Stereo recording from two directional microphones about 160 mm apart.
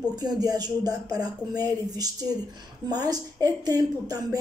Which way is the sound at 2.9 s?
25° right (ahead or behind).